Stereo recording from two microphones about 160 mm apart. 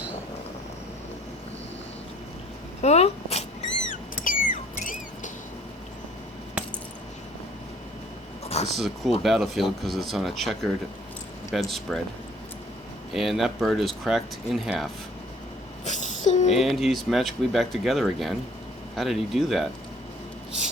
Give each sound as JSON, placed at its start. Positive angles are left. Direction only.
{"t": 2.8, "sound": "speech", "side_deg": 40}
{"t": 3.8, "sound": "rodents", "side_deg": 60}
{"t": 8.4, "sound": "a sound", "side_deg": 40}
{"t": 8.7, "sound": "speech", "side_deg": 0}
{"t": 13.1, "sound": "speech", "side_deg": 0}
{"t": 15.8, "sound": "a sound", "side_deg": 50}
{"t": 16.5, "sound": "speech", "side_deg": 0}